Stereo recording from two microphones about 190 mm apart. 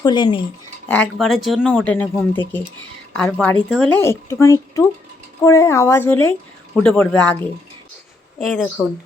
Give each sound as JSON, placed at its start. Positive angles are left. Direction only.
{"t": 0.0, "sound": "speech", "side_deg": 25}
{"t": 0.9, "sound": "speech", "side_deg": 5}
{"t": 8.4, "sound": "speech", "side_deg": 0}